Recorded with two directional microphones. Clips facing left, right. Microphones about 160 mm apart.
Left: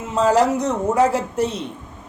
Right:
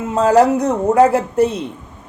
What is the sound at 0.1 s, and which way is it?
A woman's voice, 55° right (ahead or behind).